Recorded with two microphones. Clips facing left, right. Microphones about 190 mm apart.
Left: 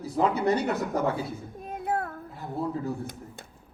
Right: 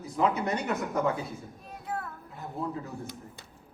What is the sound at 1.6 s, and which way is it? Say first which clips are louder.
Child singing: left 8 dB; 55° left (ahead or behind).